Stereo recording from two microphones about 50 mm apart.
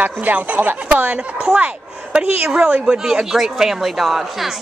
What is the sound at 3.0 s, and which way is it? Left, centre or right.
Speech, centre.